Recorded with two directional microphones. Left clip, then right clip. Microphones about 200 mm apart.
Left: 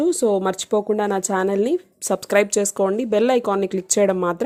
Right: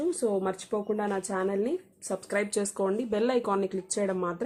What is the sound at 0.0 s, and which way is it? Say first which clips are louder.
Speech: left 9 dB; 40° left (ahead or behind).